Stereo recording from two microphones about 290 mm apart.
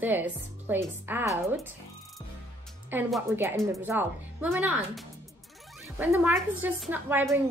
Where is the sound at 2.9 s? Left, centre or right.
Centre.